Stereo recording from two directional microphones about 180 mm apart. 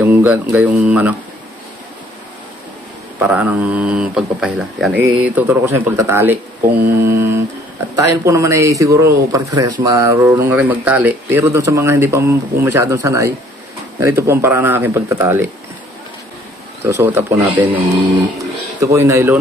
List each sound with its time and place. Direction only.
0.0 s speech: 10° right (ahead or behind)
3.2 s speech: 10° right (ahead or behind)
16.8 s speech: 15° right (ahead or behind)
18.8 s speech: 15° right (ahead or behind)